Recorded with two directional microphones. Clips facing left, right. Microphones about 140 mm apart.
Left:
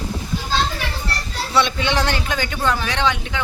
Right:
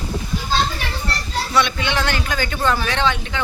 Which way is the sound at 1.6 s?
35° left (ahead or behind).